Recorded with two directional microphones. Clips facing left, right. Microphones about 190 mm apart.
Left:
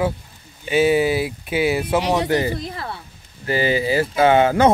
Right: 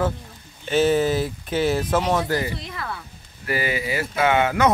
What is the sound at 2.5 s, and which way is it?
Speech, 35° left (ahead or behind).